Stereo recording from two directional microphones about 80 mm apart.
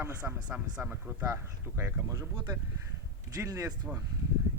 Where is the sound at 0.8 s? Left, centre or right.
Right.